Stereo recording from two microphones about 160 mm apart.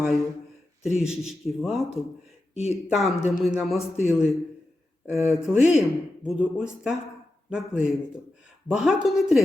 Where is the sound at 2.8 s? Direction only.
Centre (ahead or behind).